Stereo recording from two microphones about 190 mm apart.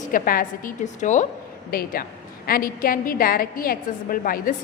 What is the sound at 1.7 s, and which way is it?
A woman's voice, 50° left (ahead or behind).